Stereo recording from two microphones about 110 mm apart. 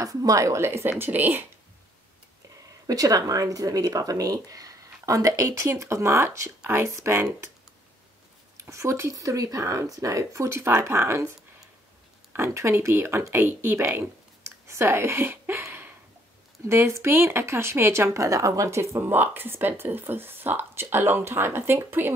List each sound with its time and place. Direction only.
0.0 s speech: 30° right (ahead or behind)
2.9 s speech: 30° right (ahead or behind)
8.5 s speech: 25° right (ahead or behind)